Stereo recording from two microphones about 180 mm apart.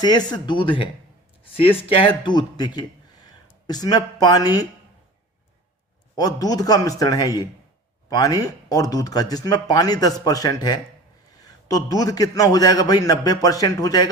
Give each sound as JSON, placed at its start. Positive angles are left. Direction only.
{"t": 0.0, "sound": "a man's voice", "side_deg": 25}
{"t": 6.1, "sound": "a man's voice", "side_deg": 20}